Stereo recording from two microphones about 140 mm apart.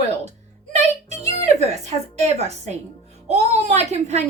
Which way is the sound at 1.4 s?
55° right (ahead or behind).